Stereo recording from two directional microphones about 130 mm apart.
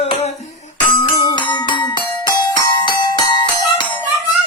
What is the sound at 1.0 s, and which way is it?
Music, 35° left (ahead or behind).